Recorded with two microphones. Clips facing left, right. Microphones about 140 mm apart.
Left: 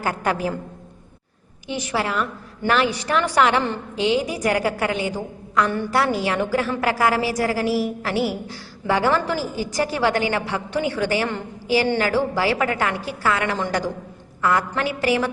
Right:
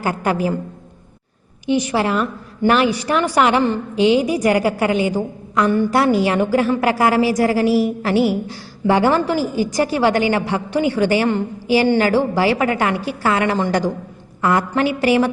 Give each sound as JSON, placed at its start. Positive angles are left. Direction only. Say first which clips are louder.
{"t": 0.0, "sound": "a woman's voice", "louder": "right 4 dB", "side_deg": -5}
{"t": 1.6, "sound": "a woman's voice", "louder": "right 7 dB", "side_deg": -15}